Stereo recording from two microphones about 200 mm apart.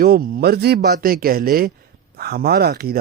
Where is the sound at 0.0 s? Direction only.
45° right (ahead or behind).